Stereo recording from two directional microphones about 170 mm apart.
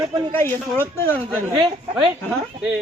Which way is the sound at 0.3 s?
10° left (ahead or behind).